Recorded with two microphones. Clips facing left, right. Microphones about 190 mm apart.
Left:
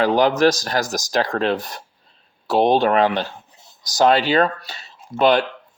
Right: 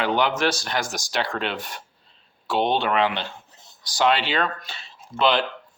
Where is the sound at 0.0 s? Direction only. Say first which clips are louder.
Left 7 dB; 40° left (ahead or behind).